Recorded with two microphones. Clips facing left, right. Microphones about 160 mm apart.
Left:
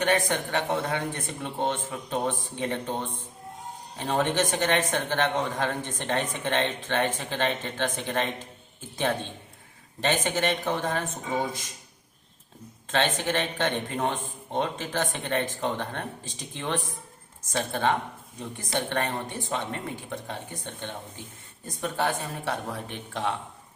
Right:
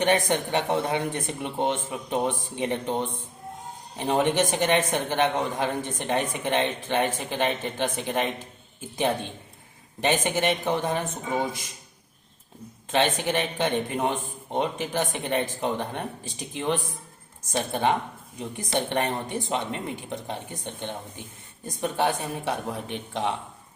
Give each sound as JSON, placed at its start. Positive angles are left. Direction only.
{"t": 0.0, "sound": "a man's voice", "side_deg": -20}
{"t": 10.0, "sound": "a man's voice", "side_deg": -15}
{"t": 12.9, "sound": "a man's voice", "side_deg": -15}